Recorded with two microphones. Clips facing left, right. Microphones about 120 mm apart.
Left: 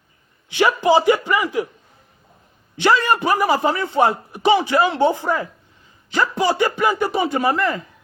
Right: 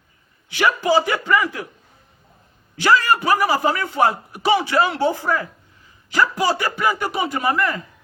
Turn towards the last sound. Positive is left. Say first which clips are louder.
# left 2 dB
turn(degrees=30)  # may be behind; listen again after turning